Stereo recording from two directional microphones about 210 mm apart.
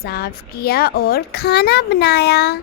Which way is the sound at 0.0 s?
50° left (ahead or behind).